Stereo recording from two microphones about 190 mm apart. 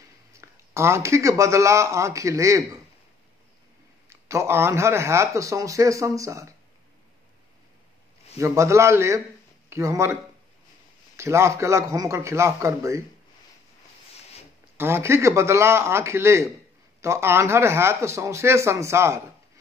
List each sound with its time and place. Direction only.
0.4 s speech: 15° right (ahead or behind)
4.1 s speech: 15° right (ahead or behind)
8.4 s speech: 15° right (ahead or behind)
11.1 s speech: 15° right (ahead or behind)
14.8 s speech: 15° right (ahead or behind)